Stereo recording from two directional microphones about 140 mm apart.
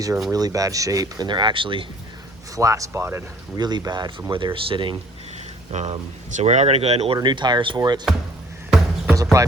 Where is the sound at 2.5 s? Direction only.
25° right (ahead or behind).